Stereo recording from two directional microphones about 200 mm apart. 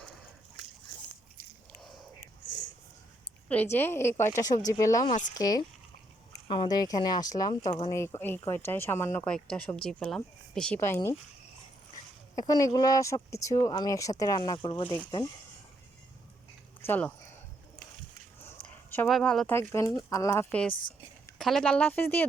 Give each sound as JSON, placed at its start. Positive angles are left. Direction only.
{"t": 3.5, "sound": "speech", "side_deg": 10}
{"t": 12.4, "sound": "speech", "side_deg": 15}
{"t": 16.8, "sound": "speech", "side_deg": 10}
{"t": 18.9, "sound": "speech", "side_deg": 5}